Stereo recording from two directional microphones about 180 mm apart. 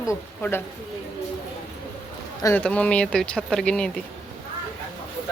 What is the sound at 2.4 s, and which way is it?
Speech, 10° left (ahead or behind).